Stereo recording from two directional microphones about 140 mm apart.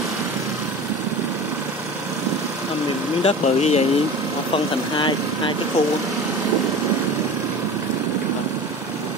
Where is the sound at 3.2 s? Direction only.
50° left (ahead or behind).